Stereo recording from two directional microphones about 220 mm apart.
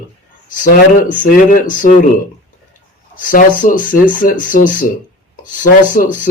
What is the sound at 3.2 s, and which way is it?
Speech, 40° left (ahead or behind).